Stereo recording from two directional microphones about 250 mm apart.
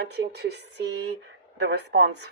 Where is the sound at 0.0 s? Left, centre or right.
Right.